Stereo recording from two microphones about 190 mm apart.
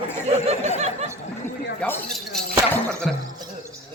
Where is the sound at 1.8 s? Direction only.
5° left (ahead or behind).